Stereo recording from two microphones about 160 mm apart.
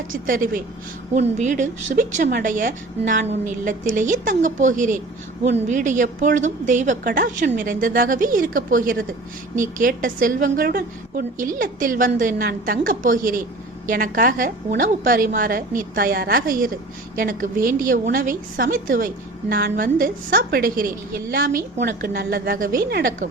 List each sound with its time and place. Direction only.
0.1 s a woman's voice: 60° right (ahead or behind); by 23.1 s 75° right (ahead or behind)